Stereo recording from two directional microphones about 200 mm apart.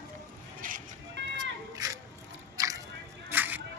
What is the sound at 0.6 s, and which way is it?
Music, 45° right (ahead or behind).